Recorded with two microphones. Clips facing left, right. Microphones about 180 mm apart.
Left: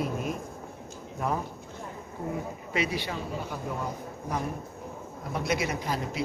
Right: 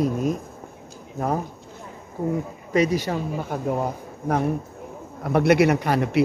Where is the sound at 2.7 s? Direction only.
40° right (ahead or behind).